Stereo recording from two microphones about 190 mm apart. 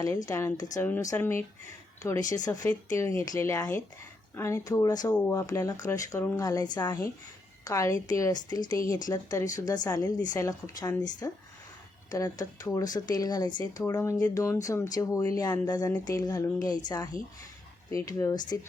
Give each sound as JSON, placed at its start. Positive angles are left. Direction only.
{"t": 0.0, "sound": "speech", "side_deg": 20}